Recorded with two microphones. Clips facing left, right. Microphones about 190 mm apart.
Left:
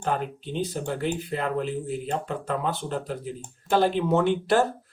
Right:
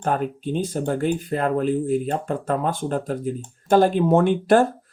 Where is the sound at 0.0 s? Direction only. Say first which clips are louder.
Right 5 dB; 50° right (ahead or behind).